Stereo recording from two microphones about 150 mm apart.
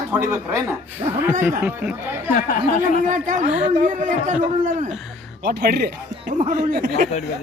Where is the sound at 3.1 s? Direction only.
60° right (ahead or behind).